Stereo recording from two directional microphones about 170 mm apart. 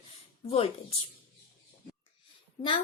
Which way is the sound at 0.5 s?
35° left (ahead or behind).